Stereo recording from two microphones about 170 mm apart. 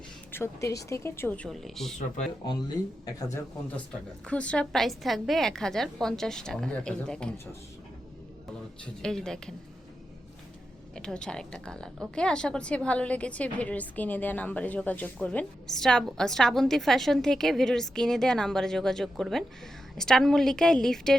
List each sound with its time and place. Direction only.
0.3 s speech: 15° left (ahead or behind)
2.5 s speech: 25° left (ahead or behind)
4.3 s a woman's voice: 5° left (ahead or behind)
9.0 s a woman's voice: 5° left (ahead or behind)
10.9 s a woman's voice: 5° left (ahead or behind)